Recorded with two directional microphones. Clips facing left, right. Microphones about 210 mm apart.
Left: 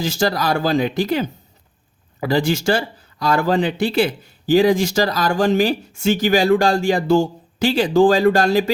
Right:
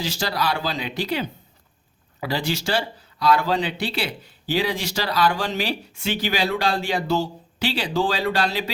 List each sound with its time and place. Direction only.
0.0 s speech: 50° left (ahead or behind)